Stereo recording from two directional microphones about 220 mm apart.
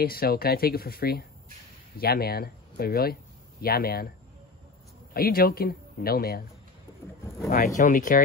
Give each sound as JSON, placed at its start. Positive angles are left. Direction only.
{"t": 0.0, "sound": "speech", "side_deg": 45}
{"t": 5.1, "sound": "speech", "side_deg": 45}
{"t": 7.5, "sound": "speech", "side_deg": 40}